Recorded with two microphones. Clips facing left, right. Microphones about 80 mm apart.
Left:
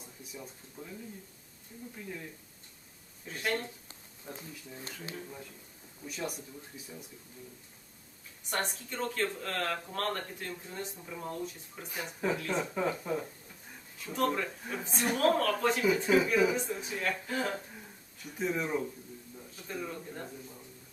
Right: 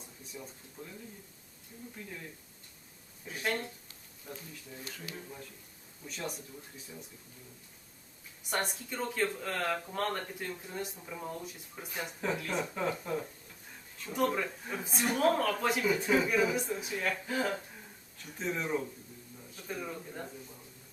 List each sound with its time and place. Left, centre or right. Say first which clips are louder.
0.3 s speech: even; centre
2.0 s speech: left 3 dB; centre
3.2 s speech: left 1 dB; centre
4.3 s speech: left 1 dB; left
5.1 s speech: left 2 dB; centre
8.6 s speech: left 1 dB; centre
14.1 s speech: even; centre
19.6 s speech: even; centre